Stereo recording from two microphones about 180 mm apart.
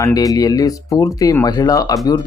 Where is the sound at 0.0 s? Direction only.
20° left (ahead or behind).